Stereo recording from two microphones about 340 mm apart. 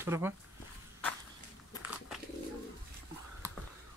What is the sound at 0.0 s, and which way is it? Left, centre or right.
Speech, centre.